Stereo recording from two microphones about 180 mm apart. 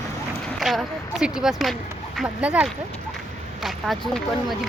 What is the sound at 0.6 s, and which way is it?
Speech, centre (ahead or behind).